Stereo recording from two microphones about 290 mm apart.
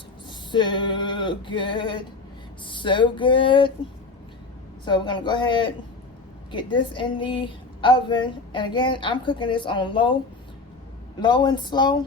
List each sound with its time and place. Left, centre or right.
0.3 s a woman's voice: centre
4.9 s a woman's voice: centre
11.2 s a woman's voice: centre